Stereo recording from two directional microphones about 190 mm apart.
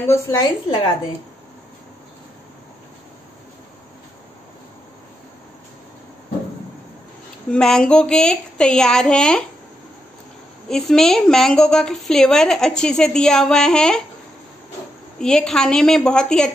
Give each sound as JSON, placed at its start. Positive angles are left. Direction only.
{"t": 0.0, "sound": "a woman's voice", "side_deg": 15}
{"t": 7.5, "sound": "a woman's voice", "side_deg": 5}
{"t": 10.7, "sound": "a woman's voice", "side_deg": 0}
{"t": 15.1, "sound": "a woman's voice", "side_deg": 5}